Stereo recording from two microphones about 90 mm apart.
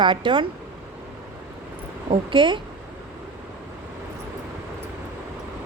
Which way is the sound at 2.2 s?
65° right (ahead or behind).